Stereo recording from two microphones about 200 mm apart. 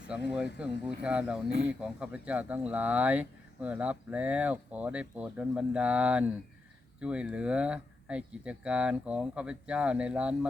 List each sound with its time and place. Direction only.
0.1 s speech: 5° right (ahead or behind)